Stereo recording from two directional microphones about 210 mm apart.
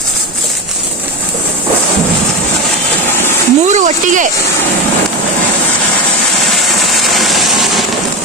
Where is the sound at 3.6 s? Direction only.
35° right (ahead or behind).